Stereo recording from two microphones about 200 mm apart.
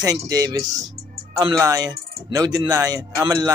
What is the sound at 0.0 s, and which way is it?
Speech, 20° right (ahead or behind).